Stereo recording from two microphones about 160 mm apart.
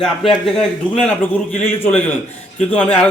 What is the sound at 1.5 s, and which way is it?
Speech, 45° left (ahead or behind).